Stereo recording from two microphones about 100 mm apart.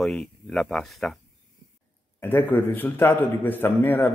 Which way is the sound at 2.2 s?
20° left (ahead or behind).